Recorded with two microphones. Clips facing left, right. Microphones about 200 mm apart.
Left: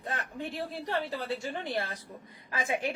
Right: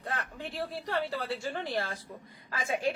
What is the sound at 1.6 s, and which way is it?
Speech, 20° left (ahead or behind).